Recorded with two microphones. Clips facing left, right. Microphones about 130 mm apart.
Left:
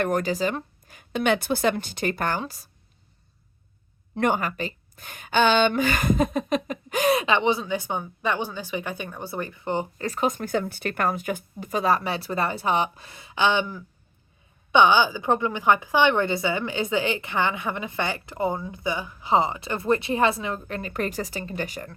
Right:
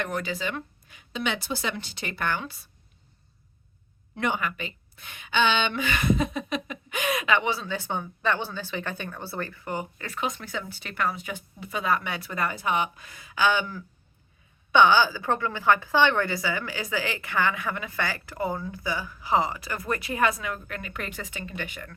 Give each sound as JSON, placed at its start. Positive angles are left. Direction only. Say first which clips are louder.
{"t": 0.0, "sound": "speech", "louder": "left 7 dB", "side_deg": 45}
{"t": 4.2, "sound": "a woman's voice", "louder": "left 5 dB", "side_deg": 40}